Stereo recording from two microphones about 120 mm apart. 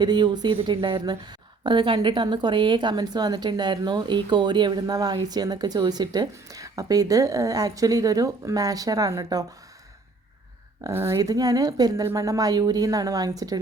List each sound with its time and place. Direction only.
0.0 s speech: 35° right (ahead or behind)
10.8 s a woman's voice: 20° right (ahead or behind)